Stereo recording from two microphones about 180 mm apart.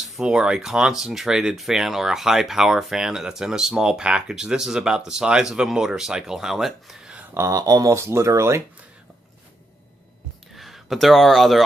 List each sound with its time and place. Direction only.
0.2 s speech: 5° right (ahead or behind)
7.4 s speech: 20° right (ahead or behind)
10.5 s speech: centre (ahead or behind)